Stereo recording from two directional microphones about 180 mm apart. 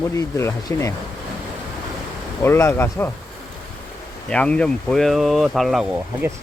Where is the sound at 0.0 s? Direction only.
15° left (ahead or behind).